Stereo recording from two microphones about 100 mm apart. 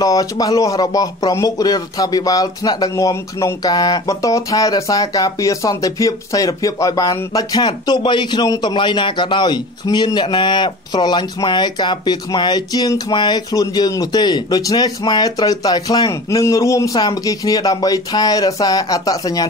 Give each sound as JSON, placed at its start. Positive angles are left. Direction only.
{"t": 0.0, "sound": "speech", "side_deg": 35}
{"t": 7.6, "sound": "a man's voice", "side_deg": 50}
{"t": 16.1, "sound": "speech", "side_deg": 30}